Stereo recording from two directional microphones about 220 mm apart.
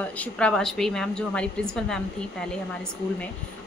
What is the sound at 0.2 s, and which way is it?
A woman's voice, 5° left (ahead or behind).